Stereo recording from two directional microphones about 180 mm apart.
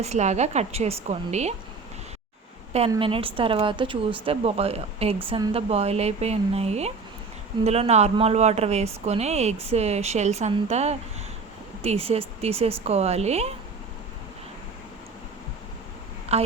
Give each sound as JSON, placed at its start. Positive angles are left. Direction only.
{"t": 0.0, "sound": "speech", "side_deg": -40}
{"t": 2.9, "sound": "speech", "side_deg": -30}
{"t": 16.3, "sound": "a woman's voice", "side_deg": -35}